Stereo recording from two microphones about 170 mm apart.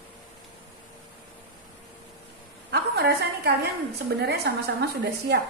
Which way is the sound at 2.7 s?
70° right (ahead or behind).